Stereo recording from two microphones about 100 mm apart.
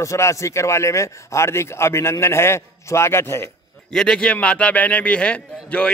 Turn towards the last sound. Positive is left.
turn(degrees=10)  # may be behind; listen again after turning